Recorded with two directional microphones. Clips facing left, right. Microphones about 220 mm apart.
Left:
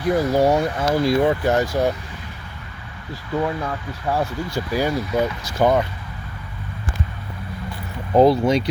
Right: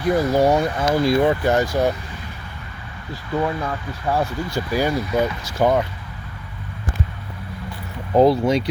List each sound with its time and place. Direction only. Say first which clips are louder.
0.0 s speech: even; 5° left (ahead or behind)
3.3 s speech: even; 5° left (ahead or behind)
8.1 s speech: even; 5° right (ahead or behind)